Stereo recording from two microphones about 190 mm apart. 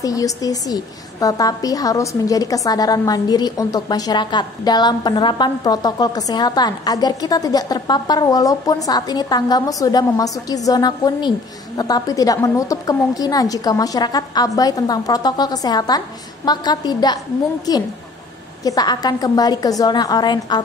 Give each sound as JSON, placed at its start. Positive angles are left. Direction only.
{"t": 0.0, "sound": "a woman's voice", "side_deg": 20}